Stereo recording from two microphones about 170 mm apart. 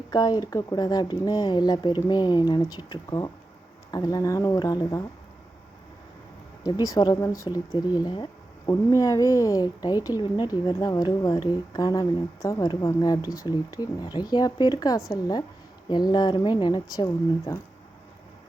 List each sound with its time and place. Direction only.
0.1 s speech: 25° left (ahead or behind)
6.6 s speech: 25° left (ahead or behind)